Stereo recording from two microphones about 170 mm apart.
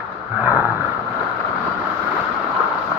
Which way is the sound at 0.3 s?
10° right (ahead or behind).